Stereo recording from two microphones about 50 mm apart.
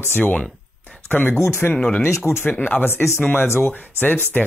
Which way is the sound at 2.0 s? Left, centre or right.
Left.